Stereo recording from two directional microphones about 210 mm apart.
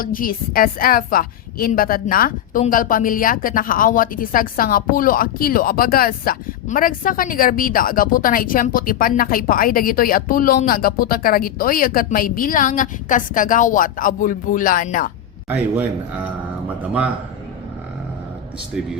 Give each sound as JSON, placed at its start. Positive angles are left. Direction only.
{"t": 0.0, "sound": "a woman's voice", "side_deg": 40}
{"t": 15.4, "sound": "a man's voice", "side_deg": -10}